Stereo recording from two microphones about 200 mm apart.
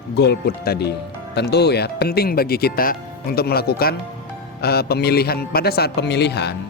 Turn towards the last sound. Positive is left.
turn(degrees=55)  # may be behind; listen again after turning